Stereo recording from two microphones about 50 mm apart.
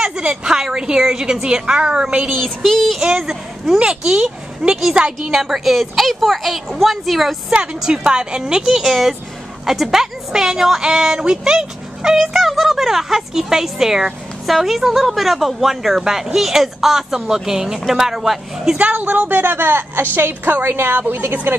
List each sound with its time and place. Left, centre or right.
0.0 s a woman's voice: right
2.4 s speech: centre
3.0 s a woman's voice: centre
7.5 s a woman's voice: centre
8.8 s a woman's voice: centre
18.8 s a woman's voice: right